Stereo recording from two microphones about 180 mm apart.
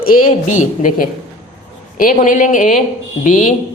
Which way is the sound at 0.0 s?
50° left (ahead or behind).